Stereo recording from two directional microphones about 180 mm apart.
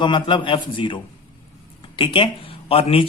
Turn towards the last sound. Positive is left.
turn(degrees=30)  # may be behind; listen again after turning